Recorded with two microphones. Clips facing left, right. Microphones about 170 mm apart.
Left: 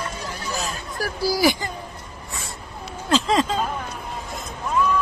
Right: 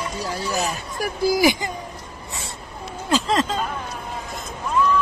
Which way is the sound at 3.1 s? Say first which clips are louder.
Left 1 dB; centre (ahead or behind).